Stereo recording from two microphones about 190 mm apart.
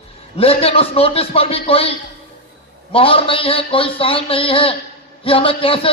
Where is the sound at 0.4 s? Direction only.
30° left (ahead or behind).